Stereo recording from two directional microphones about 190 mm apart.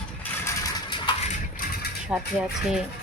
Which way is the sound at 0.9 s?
25° left (ahead or behind).